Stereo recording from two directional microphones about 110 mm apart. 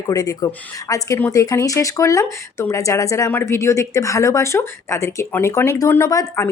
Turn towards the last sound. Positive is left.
turn(degrees=30)  # may be behind; listen again after turning